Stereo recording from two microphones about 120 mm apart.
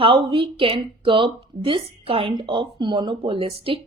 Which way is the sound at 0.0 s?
50° right (ahead or behind).